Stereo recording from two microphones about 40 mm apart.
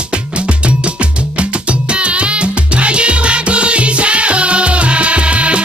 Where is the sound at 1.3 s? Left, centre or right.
Right.